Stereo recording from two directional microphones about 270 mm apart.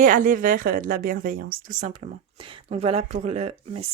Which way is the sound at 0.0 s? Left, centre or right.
Right.